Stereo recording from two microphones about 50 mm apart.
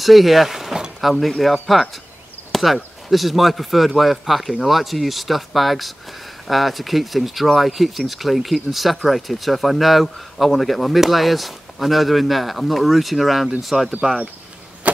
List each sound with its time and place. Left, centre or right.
0.0 s speech: centre